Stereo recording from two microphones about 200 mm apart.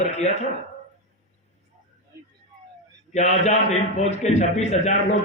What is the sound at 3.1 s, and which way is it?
A man's voice, 35° left (ahead or behind).